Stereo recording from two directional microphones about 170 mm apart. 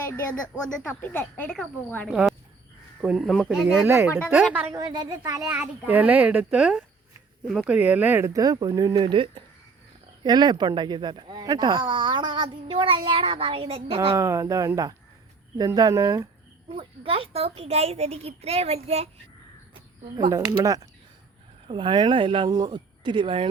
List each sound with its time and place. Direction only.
0.8 s a woman's voice: 10° left (ahead or behind); by 4.7 s 10° right (ahead or behind)
4.7 s speech: 20° right (ahead or behind)
5.5 s a child's voice: 10° right (ahead or behind); by 14.2 s 35° right (ahead or behind)
14.2 s a child's voice: 15° right (ahead or behind)
16.7 s a child's voice: 35° right (ahead or behind)
20.3 s speech: 20° right (ahead or behind)